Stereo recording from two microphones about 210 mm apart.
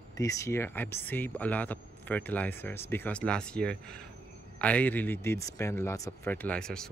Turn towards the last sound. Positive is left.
turn(degrees=5)  # may be behind; listen again after turning